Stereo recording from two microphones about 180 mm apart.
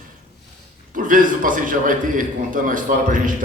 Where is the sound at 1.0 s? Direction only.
50° right (ahead or behind).